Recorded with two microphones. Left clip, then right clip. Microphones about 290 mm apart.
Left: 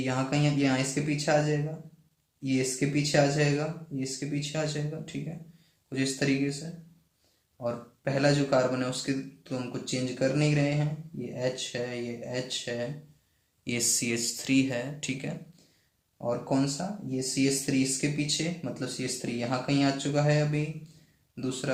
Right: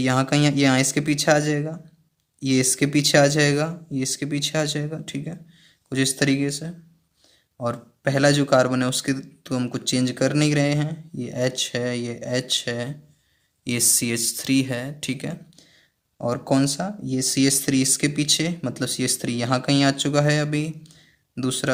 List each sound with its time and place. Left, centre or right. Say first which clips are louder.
0.0 s speech: right 8 dB; right
7.6 s speech: right 7 dB; right